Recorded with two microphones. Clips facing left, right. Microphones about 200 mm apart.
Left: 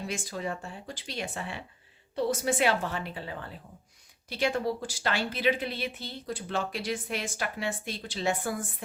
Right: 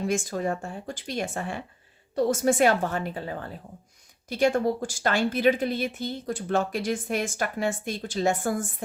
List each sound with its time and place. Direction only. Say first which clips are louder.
0.0 s speech: right 7 dB; 45° right (ahead or behind)